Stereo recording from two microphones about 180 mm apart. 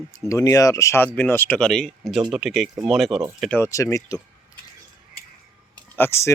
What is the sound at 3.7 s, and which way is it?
Speech, 20° left (ahead or behind).